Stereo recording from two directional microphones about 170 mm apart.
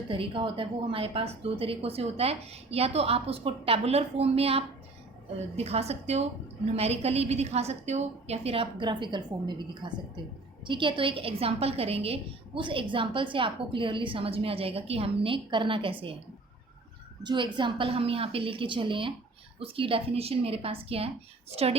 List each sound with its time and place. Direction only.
0.1 s a woman's voice: 30° right (ahead or behind)
17.2 s a woman's voice: 30° right (ahead or behind)